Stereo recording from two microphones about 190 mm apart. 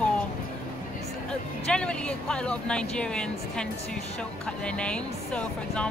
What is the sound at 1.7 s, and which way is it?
Speech, 5° left (ahead or behind).